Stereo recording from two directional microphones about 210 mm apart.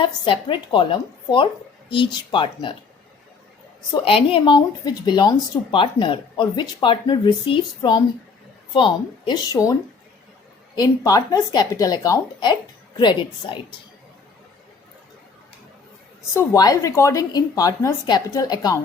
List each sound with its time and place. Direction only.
0.0 s a woman's voice: 25° left (ahead or behind)
3.9 s a woman's voice: 25° left (ahead or behind)
10.8 s a woman's voice: 15° left (ahead or behind)
16.3 s speech: 10° left (ahead or behind)